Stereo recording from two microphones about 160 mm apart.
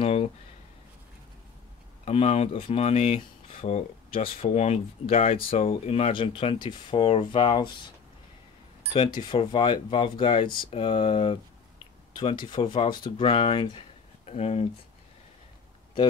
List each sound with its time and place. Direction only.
0.0 s a sound: 40° left (ahead or behind)
2.0 s speech: 40° left (ahead or behind)
8.9 s speech: 30° left (ahead or behind)